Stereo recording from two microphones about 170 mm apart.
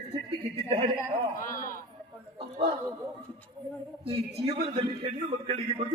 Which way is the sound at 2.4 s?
30° right (ahead or behind).